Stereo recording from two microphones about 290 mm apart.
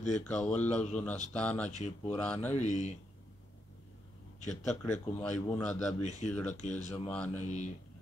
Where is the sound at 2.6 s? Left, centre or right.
Left.